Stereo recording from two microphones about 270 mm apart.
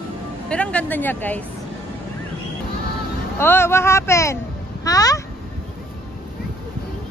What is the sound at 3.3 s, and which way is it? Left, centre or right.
Speech, centre.